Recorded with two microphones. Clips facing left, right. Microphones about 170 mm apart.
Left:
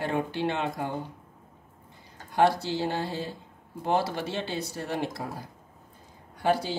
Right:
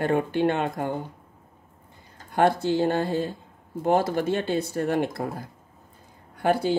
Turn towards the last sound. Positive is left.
turn(degrees=-55)  # may be behind; listen again after turning